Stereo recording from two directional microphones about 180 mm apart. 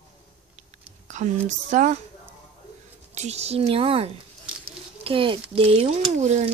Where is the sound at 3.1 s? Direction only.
40° right (ahead or behind).